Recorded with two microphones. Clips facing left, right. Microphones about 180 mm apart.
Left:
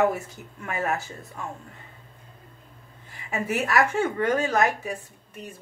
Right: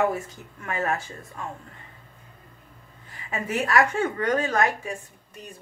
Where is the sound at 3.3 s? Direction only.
10° left (ahead or behind).